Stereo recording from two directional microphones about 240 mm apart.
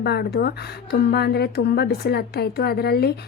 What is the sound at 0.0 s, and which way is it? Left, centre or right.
Speech, left.